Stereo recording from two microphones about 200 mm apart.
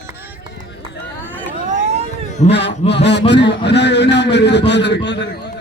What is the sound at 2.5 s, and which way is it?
A man's voice, 60° left (ahead or behind).